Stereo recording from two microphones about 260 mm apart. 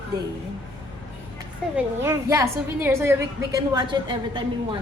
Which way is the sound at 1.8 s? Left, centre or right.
Centre.